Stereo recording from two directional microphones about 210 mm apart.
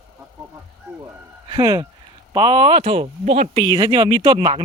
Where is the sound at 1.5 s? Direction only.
20° right (ahead or behind).